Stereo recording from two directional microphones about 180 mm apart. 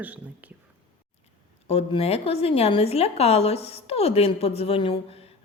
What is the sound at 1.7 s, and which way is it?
A woman's voice, 35° left (ahead or behind).